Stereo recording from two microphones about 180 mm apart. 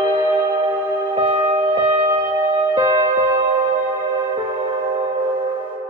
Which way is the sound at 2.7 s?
25° right (ahead or behind).